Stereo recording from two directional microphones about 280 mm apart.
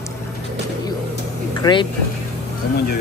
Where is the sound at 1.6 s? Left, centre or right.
Centre.